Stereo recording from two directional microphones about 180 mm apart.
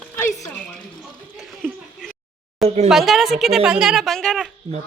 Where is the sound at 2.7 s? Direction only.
35° right (ahead or behind).